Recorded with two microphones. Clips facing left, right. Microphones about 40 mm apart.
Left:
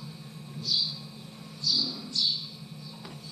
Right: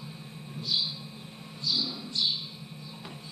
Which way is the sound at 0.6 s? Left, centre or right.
Right.